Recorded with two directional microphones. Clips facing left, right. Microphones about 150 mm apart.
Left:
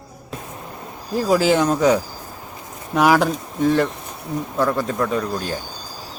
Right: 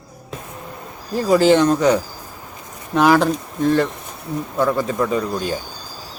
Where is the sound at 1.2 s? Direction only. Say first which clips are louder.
Right 3 dB; centre (ahead or behind).